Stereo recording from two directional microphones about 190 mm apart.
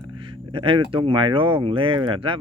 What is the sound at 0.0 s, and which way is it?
Speech, 25° right (ahead or behind).